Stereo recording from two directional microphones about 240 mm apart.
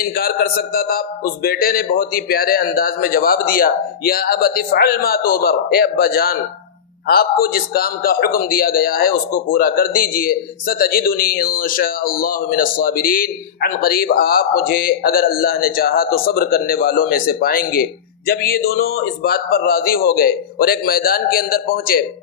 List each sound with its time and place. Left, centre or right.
0.0 s a man's voice: left